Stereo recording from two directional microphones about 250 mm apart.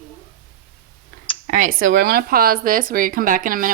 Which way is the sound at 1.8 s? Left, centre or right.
Right.